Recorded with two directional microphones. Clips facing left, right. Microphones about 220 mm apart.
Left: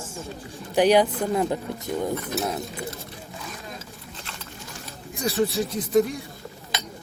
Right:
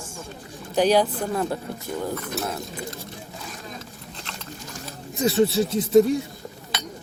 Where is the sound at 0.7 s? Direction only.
15° left (ahead or behind).